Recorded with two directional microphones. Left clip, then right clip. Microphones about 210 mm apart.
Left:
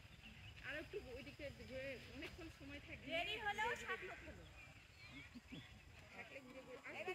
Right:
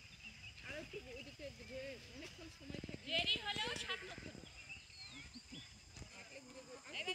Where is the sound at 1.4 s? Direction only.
50° right (ahead or behind).